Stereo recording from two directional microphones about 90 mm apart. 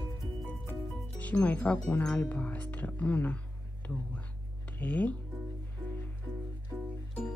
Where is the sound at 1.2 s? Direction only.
15° left (ahead or behind).